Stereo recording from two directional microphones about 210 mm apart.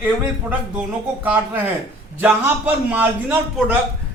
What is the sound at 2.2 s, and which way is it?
A man's voice, 10° right (ahead or behind).